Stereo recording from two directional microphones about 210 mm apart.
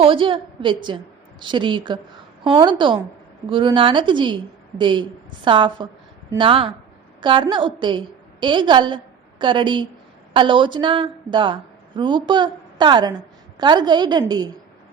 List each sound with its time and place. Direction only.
0.0 s a woman's voice: 25° right (ahead or behind)